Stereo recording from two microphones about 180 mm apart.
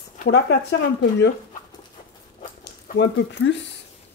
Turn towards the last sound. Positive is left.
turn(degrees=70)  # may be behind; listen again after turning